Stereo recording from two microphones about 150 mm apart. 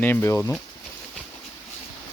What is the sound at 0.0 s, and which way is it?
Speech, 15° left (ahead or behind).